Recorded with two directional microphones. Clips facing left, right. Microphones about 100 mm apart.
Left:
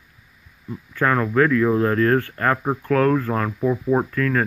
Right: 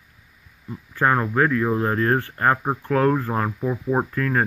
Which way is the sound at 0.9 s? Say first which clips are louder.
Left 1 dB; 20° right (ahead or behind).